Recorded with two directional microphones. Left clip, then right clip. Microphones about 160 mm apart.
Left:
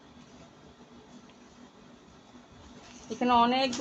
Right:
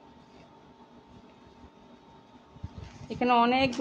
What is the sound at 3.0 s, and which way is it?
Speech, 45° right (ahead or behind).